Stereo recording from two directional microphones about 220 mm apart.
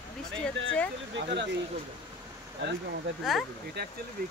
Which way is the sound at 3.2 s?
Centre (ahead or behind).